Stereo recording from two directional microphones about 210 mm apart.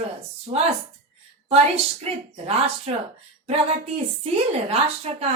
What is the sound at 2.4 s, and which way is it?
Speech, 30° right (ahead or behind).